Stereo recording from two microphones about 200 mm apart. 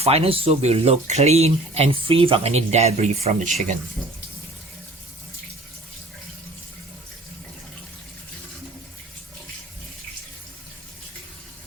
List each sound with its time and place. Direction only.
0.0 s speech: 30° right (ahead or behind)